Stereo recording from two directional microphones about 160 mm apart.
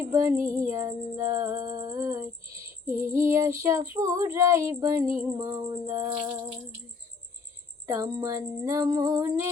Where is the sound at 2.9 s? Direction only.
15° right (ahead or behind).